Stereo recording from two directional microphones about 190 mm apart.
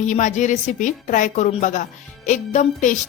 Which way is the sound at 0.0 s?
40° left (ahead or behind).